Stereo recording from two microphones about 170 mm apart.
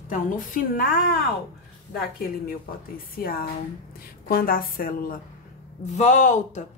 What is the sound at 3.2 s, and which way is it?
A woman's voice, 60° left (ahead or behind).